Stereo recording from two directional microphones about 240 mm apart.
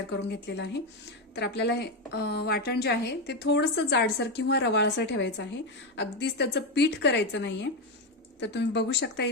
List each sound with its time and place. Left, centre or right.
0.3 s a woman's voice: left